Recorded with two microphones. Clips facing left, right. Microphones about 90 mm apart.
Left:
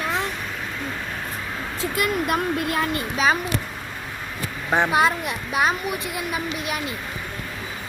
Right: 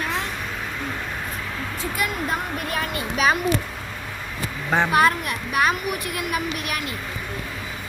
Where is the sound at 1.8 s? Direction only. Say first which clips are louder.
Left 4 dB; 90° left.